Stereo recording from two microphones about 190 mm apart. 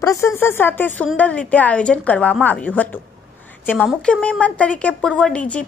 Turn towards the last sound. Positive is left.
turn(degrees=5)  # may be behind; listen again after turning